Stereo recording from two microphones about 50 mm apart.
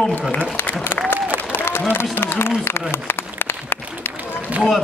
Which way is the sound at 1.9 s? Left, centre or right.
Left.